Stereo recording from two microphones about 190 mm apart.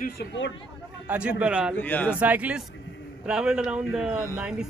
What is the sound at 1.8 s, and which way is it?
Speech, 10° left (ahead or behind).